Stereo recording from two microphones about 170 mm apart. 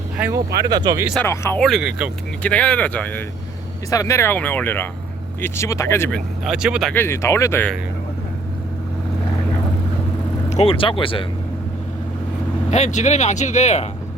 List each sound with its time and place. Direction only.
0.6 s speech: 25° right (ahead or behind)
1.2 s speech: 10° left (ahead or behind)
1.6 s speech: 5° right (ahead or behind)
2.4 s speech: 5° left (ahead or behind)
6.9 s speech: 15° left (ahead or behind)
10.5 s speech: 35° left (ahead or behind)
12.7 s speech: 45° left (ahead or behind)